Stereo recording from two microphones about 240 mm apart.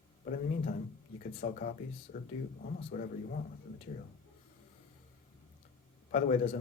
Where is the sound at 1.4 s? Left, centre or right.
Left.